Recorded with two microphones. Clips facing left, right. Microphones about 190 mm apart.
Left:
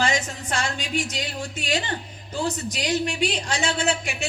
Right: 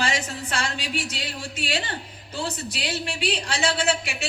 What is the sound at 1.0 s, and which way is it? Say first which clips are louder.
Speech: left 3 dB; 15° left (ahead or behind).